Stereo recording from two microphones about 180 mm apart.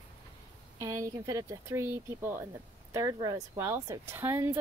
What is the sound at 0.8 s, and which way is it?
Speech, 15° right (ahead or behind).